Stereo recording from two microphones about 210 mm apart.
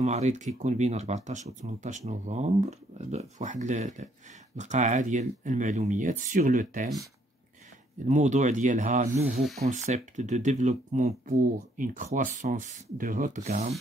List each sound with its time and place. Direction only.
0.0 s speech: 35° right (ahead or behind)
8.1 s speech: 35° right (ahead or behind)